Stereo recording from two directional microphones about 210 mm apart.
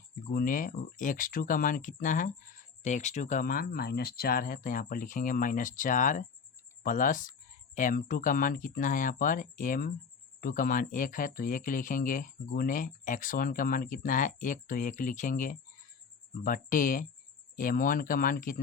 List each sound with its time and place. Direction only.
0.3 s speech: 45° left (ahead or behind)